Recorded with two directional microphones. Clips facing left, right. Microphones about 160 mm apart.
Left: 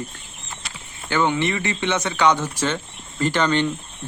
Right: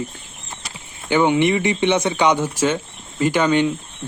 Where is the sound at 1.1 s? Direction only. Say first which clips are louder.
Right 5 dB; 15° right (ahead or behind).